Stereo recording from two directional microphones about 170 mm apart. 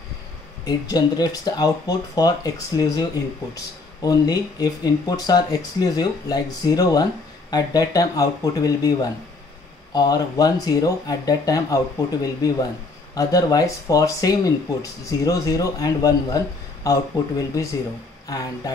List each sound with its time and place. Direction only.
0.7 s speech: 25° left (ahead or behind)